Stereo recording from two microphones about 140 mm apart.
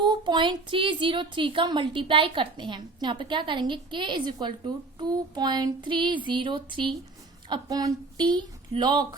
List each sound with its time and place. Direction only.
0.0 s a woman's voice: 30° right (ahead or behind)